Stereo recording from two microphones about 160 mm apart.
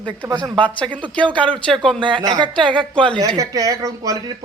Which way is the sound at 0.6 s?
10° left (ahead or behind).